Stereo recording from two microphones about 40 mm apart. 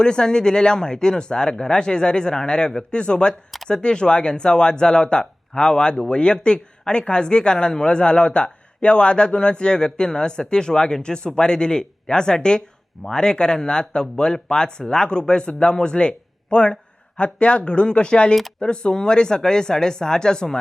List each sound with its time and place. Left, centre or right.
0.0 s speech: left